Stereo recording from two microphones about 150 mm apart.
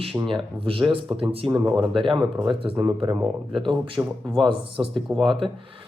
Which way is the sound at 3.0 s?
20° right (ahead or behind).